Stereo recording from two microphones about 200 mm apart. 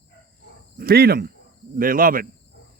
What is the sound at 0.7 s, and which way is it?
Speech, 50° right (ahead or behind).